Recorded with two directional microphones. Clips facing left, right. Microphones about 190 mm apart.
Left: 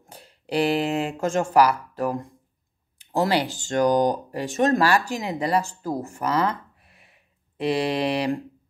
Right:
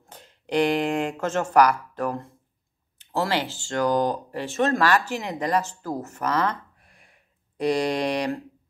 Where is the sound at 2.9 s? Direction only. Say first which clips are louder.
Left 3 dB; 15° left (ahead or behind).